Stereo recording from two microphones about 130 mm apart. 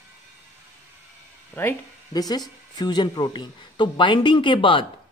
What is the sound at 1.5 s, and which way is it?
Speech, 15° left (ahead or behind).